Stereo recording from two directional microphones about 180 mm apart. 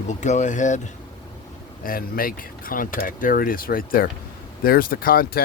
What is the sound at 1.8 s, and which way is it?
Speech, 55° left (ahead or behind).